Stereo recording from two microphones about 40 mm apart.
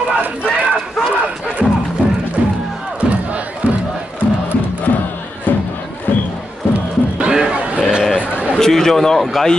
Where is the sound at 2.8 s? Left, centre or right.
Right.